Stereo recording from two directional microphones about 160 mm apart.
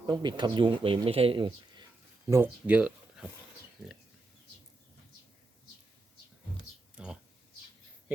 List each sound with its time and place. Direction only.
0.0 s speech: 25° right (ahead or behind)
2.2 s speech: 15° right (ahead or behind)
6.9 s a sound: 5° right (ahead or behind)